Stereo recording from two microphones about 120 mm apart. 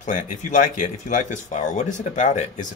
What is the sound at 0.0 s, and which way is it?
Speech, 90° left.